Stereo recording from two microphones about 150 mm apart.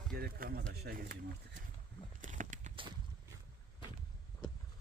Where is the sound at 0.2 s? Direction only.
85° right.